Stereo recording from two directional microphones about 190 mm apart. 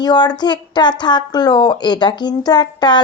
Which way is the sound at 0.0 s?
20° left (ahead or behind).